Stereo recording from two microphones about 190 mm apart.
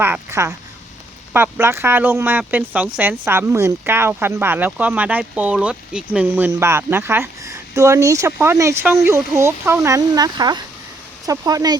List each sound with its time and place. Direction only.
0.0 s speech: 10° right (ahead or behind)